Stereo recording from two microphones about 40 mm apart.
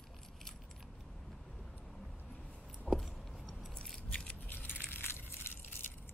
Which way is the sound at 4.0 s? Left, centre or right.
Left.